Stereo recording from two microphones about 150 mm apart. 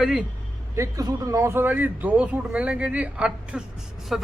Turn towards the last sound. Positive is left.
turn(degrees=-5)  # may be behind; listen again after turning